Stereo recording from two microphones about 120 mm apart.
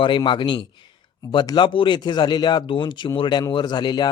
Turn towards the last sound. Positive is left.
turn(degrees=35)  # may be behind; listen again after turning